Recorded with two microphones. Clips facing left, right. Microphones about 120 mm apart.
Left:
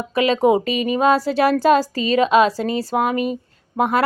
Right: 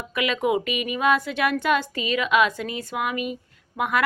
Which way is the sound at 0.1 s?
35° left (ahead or behind).